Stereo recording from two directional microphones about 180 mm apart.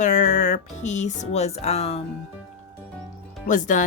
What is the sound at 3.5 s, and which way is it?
Speech, 45° left (ahead or behind).